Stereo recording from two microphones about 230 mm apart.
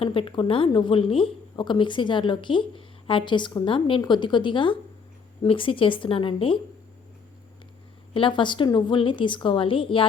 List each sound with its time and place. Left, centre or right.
0.0 s a woman's voice: left
8.1 s a woman's voice: left